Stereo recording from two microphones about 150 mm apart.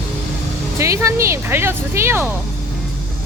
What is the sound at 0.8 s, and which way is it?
Speech, 20° right (ahead or behind).